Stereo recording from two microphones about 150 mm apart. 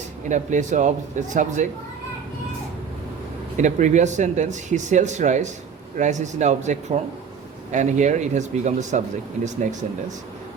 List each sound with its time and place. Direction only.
0.3 s speech: 55° right (ahead or behind)
3.6 s speech: 55° right (ahead or behind)